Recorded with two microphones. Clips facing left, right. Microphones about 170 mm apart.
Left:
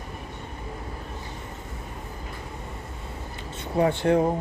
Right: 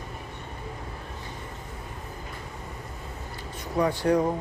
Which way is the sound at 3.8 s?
25° left (ahead or behind).